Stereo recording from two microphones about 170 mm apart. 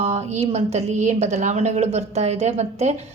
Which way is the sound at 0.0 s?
40° right (ahead or behind).